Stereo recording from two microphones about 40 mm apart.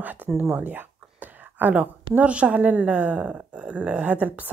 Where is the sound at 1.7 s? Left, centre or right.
Right.